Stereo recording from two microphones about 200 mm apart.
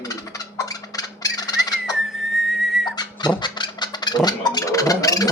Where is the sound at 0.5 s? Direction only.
15° left (ahead or behind).